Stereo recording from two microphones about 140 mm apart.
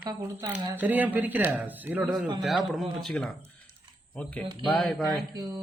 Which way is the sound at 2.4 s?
Centre (ahead or behind).